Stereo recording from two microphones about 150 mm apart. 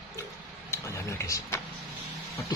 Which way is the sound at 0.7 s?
20° left (ahead or behind).